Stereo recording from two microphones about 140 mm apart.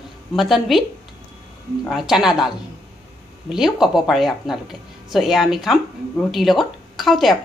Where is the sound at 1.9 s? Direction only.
Centre (ahead or behind).